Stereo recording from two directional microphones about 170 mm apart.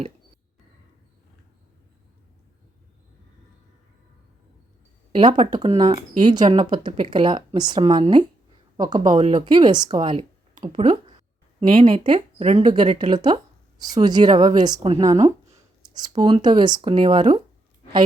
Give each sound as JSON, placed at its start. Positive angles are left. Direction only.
{"t": 5.1, "sound": "speech", "side_deg": -30}
{"t": 14.8, "sound": "speech", "side_deg": -35}
{"t": 15.8, "sound": "speech", "side_deg": -25}